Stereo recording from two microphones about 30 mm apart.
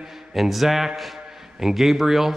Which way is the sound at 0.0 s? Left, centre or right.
Centre.